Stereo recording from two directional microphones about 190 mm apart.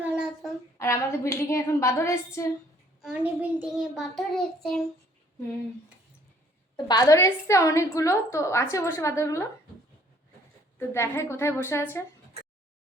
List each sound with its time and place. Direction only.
0.0 s a sound: 5° right (ahead or behind)
0.8 s a woman's voice: 15° left (ahead or behind)
3.0 s a child's voice: 5° right (ahead or behind)
6.7 s a woman's voice: 20° left (ahead or behind)
10.8 s a woman's voice: 15° left (ahead or behind)
12.4 s a sound: 35° right (ahead or behind)